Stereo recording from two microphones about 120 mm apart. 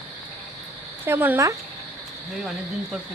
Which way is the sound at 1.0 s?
15° right (ahead or behind).